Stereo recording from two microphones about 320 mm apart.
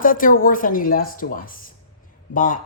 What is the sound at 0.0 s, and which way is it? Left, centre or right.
Speech, left.